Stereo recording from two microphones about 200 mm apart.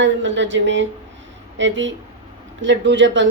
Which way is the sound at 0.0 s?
65° right (ahead or behind).